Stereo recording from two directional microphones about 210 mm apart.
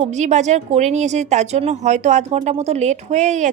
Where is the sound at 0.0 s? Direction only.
35° right (ahead or behind).